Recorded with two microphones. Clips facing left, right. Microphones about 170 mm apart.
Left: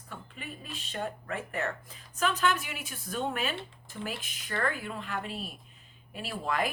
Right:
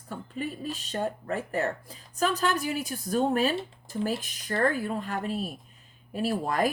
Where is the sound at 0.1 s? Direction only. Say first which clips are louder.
Right 9 dB; 40° right (ahead or behind).